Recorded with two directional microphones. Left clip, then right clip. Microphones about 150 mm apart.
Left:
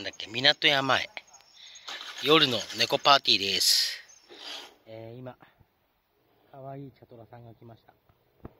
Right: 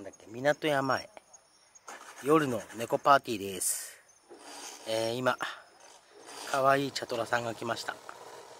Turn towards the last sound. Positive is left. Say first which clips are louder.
# right 19 dB
turn(degrees=-15)  # may be behind; listen again after turning